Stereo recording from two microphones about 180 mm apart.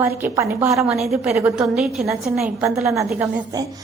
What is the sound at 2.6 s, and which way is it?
Speech, 15° right (ahead or behind).